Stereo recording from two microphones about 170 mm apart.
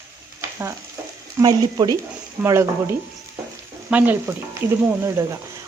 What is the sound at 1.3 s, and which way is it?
Speech, 25° right (ahead or behind).